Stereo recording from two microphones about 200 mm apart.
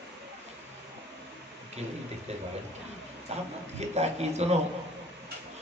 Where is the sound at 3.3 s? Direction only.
30° right (ahead or behind).